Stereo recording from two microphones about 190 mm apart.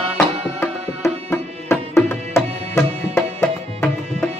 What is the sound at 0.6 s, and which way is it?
Tabla, 15° left (ahead or behind).